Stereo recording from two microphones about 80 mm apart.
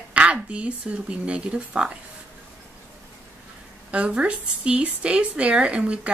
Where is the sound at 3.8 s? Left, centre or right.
Centre.